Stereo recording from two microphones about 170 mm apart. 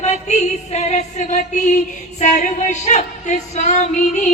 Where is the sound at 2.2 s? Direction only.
45° left (ahead or behind).